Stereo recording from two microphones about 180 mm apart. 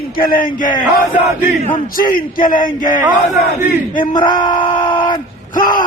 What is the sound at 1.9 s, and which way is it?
A man's voice, 50° left (ahead or behind).